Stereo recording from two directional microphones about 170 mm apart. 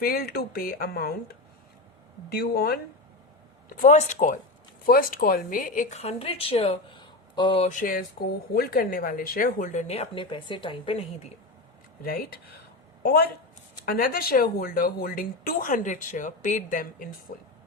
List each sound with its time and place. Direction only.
0.0 s speech: 60° left (ahead or behind)
2.3 s speech: 65° left (ahead or behind)
3.7 s a woman's voice: 50° left (ahead or behind)
4.9 s a woman's voice: 60° left (ahead or behind); by 11.0 s 30° left (ahead or behind)
12.0 s a woman's voice: 60° left (ahead or behind)
17.3 s speech: 65° left (ahead or behind)